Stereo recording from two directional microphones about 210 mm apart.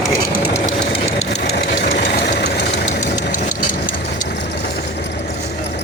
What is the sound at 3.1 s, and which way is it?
Vehicle, 35° left (ahead or behind).